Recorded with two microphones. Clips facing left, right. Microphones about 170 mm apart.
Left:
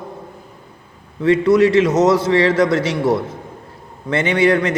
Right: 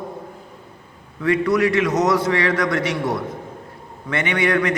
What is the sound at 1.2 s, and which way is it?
A man's voice, 25° left (ahead or behind).